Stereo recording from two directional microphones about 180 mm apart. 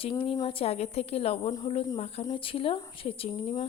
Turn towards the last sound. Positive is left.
turn(degrees=30)  # may be behind; listen again after turning